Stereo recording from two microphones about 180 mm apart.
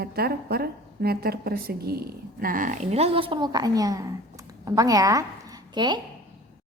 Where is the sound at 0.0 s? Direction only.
60° right (ahead or behind); by 6.0 s 25° right (ahead or behind).